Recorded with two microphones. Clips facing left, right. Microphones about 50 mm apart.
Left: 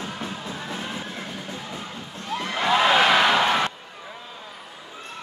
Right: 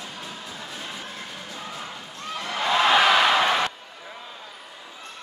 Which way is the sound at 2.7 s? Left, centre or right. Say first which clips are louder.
Even; centre.